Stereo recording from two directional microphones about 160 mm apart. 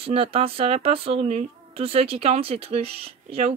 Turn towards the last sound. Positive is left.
turn(degrees=-40)  # may be behind; listen again after turning